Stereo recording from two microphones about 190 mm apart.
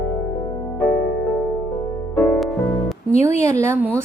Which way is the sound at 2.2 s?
10° left (ahead or behind).